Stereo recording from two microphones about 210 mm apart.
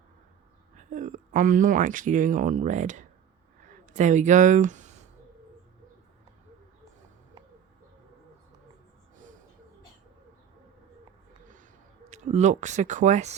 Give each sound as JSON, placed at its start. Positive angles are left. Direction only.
{"t": 0.8, "sound": "speech", "side_deg": -35}
{"t": 12.1, "sound": "speech", "side_deg": -35}